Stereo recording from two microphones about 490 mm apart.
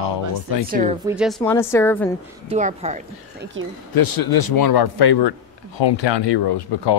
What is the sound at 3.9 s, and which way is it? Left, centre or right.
Speech, left.